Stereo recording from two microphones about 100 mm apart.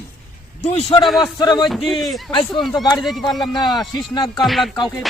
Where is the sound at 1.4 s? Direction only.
45° left (ahead or behind).